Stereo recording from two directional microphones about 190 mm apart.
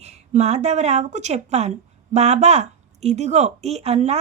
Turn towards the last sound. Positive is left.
turn(degrees=-35)  # may be behind; listen again after turning